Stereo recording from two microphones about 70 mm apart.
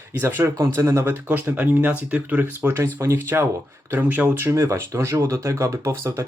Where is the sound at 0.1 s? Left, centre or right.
Right.